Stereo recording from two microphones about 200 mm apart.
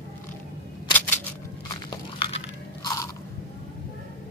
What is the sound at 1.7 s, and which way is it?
Crunch, 25° left (ahead or behind).